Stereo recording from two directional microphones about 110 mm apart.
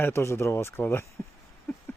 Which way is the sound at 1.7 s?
25° left (ahead or behind).